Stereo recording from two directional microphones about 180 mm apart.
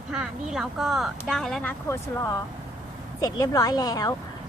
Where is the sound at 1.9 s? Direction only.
15° left (ahead or behind).